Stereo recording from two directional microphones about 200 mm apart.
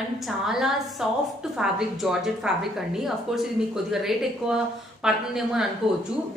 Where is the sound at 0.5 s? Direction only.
Centre (ahead or behind).